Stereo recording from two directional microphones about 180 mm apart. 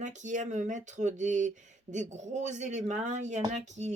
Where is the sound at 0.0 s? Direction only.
40° right (ahead or behind).